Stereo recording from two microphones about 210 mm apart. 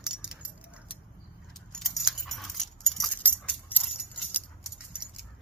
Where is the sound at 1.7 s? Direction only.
Centre (ahead or behind).